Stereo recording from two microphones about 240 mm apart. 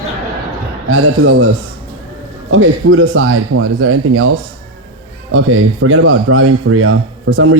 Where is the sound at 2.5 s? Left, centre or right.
Right.